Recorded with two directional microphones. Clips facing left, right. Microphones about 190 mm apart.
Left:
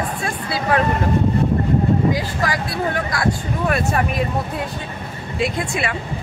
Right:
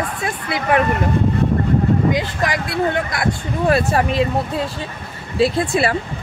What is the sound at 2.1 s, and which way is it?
Speech, 20° right (ahead or behind).